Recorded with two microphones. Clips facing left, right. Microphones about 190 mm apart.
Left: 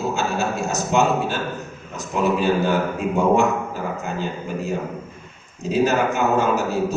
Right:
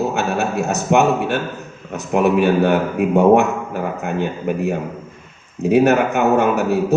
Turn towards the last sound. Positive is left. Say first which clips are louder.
# right 4 dB
turn(degrees=-60)  # may be behind; listen again after turning